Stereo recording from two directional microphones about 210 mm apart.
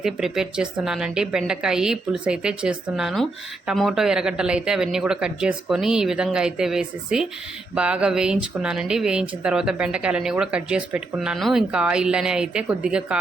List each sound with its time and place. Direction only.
0.0 s speech: centre (ahead or behind)